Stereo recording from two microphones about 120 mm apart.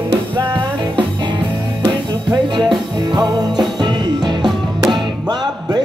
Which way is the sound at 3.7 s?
40° right (ahead or behind).